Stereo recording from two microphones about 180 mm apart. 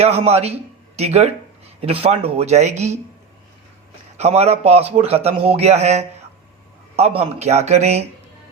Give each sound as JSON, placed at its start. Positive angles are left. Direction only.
{"t": 0.0, "sound": "a man's voice", "side_deg": -35}
{"t": 4.2, "sound": "a man's voice", "side_deg": -35}